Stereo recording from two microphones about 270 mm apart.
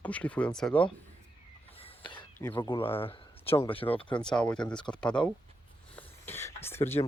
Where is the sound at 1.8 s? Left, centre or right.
Centre.